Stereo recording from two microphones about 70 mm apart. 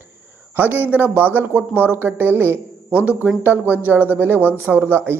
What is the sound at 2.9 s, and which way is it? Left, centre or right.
A man's voice, centre.